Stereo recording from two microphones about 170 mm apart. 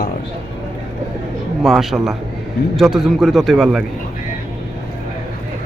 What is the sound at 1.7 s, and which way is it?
A man's voice, centre (ahead or behind).